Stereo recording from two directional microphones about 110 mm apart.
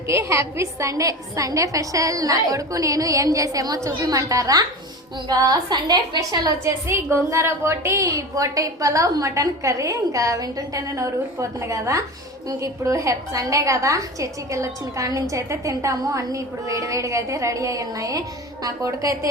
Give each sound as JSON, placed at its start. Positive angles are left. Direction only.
{"t": 0.1, "sound": "a woman's voice", "side_deg": -25}
{"t": 6.8, "sound": "a woman's voice", "side_deg": -25}